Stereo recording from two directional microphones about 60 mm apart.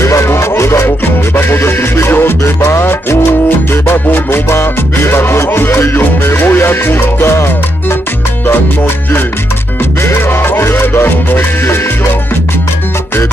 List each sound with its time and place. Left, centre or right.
0.0 s music: left
8.5 s music: left